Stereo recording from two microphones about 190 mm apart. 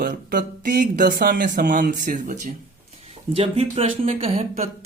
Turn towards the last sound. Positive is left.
turn(degrees=-35)  # may be behind; listen again after turning